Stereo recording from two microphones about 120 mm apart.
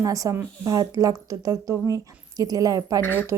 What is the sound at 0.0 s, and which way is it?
Speech, 30° right (ahead or behind).